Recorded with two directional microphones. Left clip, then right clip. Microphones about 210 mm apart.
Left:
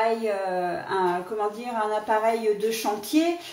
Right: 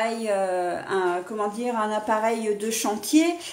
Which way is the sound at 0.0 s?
50° right (ahead or behind).